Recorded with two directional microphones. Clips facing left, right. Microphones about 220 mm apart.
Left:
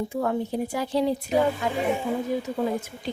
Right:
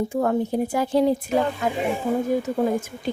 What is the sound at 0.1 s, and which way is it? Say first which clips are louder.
A woman's voice: right 4 dB; 45° right (ahead or behind).